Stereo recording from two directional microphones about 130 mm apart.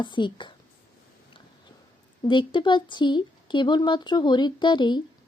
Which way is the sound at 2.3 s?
40° left (ahead or behind).